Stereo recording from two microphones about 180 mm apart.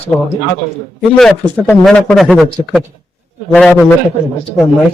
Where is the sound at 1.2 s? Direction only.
Centre (ahead or behind).